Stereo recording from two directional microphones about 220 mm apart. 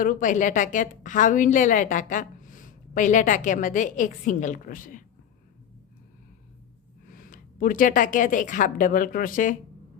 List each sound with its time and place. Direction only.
0.0 s a woman's voice: 35° left (ahead or behind)
7.1 s speech: 40° left (ahead or behind)